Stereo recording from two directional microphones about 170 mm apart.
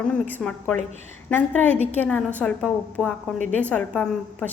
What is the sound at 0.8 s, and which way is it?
Speech, 40° right (ahead or behind).